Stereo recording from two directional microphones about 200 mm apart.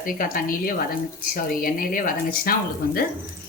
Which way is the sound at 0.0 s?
45° left (ahead or behind).